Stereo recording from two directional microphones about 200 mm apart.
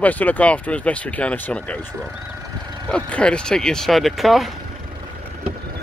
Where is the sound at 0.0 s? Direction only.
10° left (ahead or behind).